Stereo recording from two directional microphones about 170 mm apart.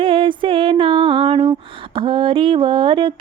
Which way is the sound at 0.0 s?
30° right (ahead or behind).